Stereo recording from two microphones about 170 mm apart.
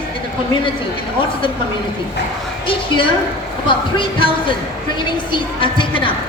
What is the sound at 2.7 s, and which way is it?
A man's voice, 30° left (ahead or behind).